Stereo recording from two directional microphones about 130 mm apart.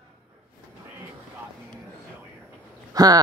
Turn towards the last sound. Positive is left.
turn(degrees=-30)  # may be behind; listen again after turning